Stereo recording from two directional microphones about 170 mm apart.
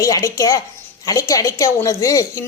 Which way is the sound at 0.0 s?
20° left (ahead or behind).